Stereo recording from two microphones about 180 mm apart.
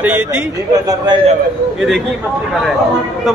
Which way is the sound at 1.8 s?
Centre (ahead or behind).